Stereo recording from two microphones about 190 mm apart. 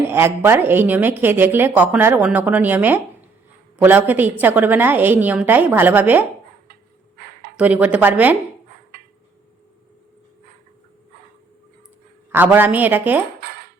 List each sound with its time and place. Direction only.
0.1 s a woman's voice: 10° right (ahead or behind)
7.5 s a woman's voice: 10° right (ahead or behind)
12.3 s a woman's voice: 10° right (ahead or behind)
13.4 s cutlery: 55° right (ahead or behind)